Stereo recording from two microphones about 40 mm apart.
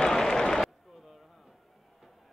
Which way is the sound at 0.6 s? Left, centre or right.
Centre.